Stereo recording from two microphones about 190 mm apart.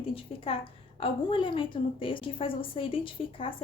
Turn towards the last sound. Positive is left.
turn(degrees=30)  # may be behind; listen again after turning